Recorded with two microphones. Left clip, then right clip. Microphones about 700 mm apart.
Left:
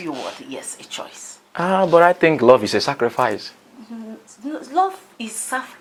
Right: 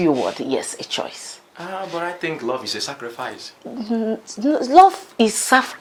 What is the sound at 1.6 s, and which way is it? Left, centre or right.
Speech, left.